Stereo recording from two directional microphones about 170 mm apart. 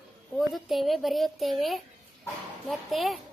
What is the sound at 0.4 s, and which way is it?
A woman's voice, centre (ahead or behind).